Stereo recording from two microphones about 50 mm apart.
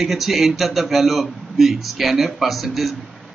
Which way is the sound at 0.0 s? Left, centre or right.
Centre.